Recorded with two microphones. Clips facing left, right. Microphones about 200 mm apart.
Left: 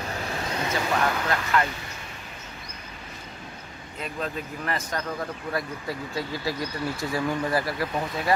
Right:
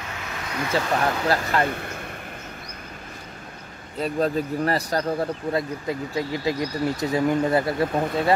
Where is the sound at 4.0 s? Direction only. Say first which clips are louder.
Right 9 dB; 35° right (ahead or behind).